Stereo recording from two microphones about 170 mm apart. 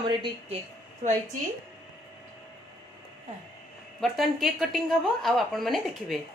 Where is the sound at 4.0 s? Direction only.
Centre (ahead or behind).